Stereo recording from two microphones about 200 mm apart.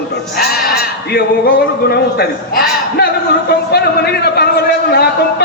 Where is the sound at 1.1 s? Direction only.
55° left (ahead or behind).